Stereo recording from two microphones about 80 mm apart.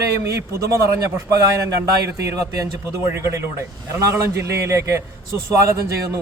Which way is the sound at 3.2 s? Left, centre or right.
Right.